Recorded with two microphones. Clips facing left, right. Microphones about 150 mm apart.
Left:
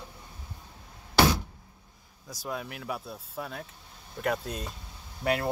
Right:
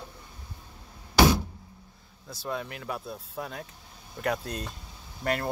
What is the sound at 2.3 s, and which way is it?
Speech, 10° left (ahead or behind).